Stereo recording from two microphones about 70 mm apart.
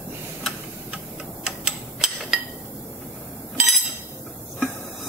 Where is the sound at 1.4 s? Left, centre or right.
Centre.